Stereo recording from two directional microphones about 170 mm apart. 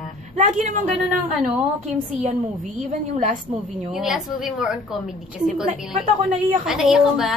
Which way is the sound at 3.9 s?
Centre (ahead or behind).